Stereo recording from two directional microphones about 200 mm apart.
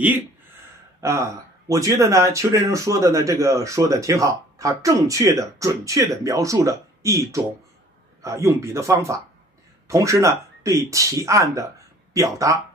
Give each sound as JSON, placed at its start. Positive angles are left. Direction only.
{"t": 1.0, "sound": "speech", "side_deg": -15}